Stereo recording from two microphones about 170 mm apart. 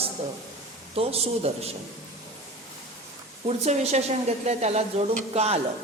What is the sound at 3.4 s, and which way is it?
A woman's voice, 40° right (ahead or behind).